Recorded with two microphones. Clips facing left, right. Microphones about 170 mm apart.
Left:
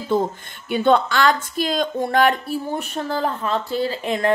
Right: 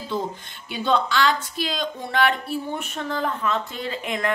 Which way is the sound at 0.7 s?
55° left (ahead or behind).